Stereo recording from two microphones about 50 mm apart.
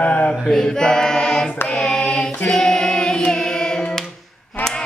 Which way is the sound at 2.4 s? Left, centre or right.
Centre.